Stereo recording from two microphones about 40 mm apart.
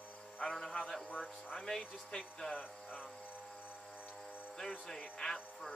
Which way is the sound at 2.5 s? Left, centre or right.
Left.